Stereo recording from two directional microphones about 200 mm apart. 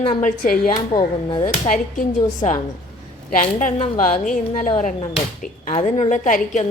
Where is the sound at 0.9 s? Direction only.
25° left (ahead or behind).